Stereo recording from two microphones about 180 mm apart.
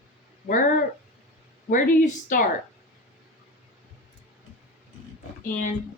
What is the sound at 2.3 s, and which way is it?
Speech, 45° left (ahead or behind).